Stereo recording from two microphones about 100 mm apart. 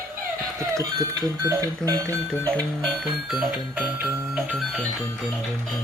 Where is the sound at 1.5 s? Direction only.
35° right (ahead or behind).